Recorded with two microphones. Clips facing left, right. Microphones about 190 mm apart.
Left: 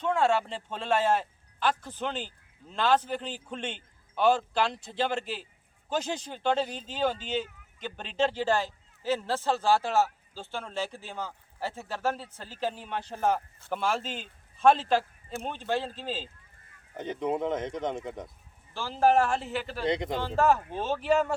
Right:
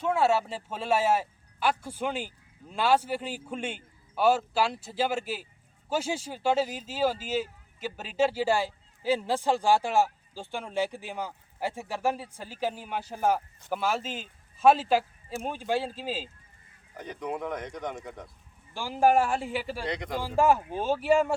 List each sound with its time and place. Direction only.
0.0 s speech: 5° right (ahead or behind)
17.0 s speech: 25° left (ahead or behind)
18.7 s speech: 15° right (ahead or behind)
19.8 s speech: 25° left (ahead or behind)
20.1 s speech: 10° right (ahead or behind)